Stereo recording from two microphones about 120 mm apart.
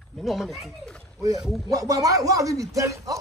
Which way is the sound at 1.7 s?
30° right (ahead or behind).